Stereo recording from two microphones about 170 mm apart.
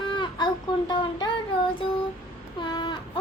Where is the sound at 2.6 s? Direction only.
25° left (ahead or behind).